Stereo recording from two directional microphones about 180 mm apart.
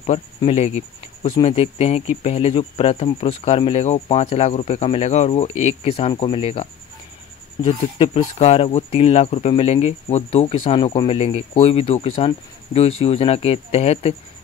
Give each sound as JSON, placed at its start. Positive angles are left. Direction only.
{"t": 0.5, "sound": "speech", "side_deg": 35}